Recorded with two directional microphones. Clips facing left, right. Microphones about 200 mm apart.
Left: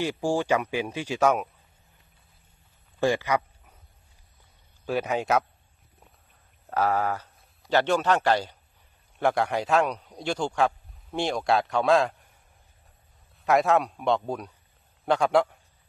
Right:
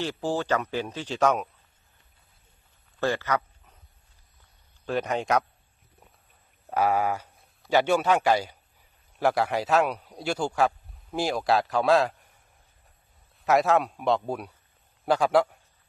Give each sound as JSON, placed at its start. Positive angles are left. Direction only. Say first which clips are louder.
{"t": 0.0, "sound": "speech", "louder": "left 2 dB", "side_deg": 10}
{"t": 3.0, "sound": "a sound", "louder": "left 2 dB", "side_deg": 15}
{"t": 4.8, "sound": "a man's voice", "louder": "left 1 dB", "side_deg": 5}
{"t": 6.7, "sound": "a man's voice", "louder": "right 1 dB", "side_deg": -10}
{"t": 13.4, "sound": "a man's voice", "louder": "even", "side_deg": 0}